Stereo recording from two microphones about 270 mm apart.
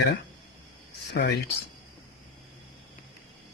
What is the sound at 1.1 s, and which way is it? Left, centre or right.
Speech, left.